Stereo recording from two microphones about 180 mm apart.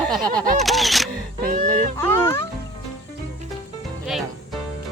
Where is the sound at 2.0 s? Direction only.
15° left (ahead or behind).